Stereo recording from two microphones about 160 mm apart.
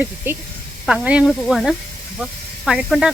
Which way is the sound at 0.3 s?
10° right (ahead or behind).